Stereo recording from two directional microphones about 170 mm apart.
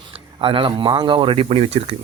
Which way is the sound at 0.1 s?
30° right (ahead or behind).